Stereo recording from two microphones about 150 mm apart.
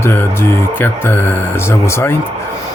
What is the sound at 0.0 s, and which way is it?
Speech, 15° left (ahead or behind).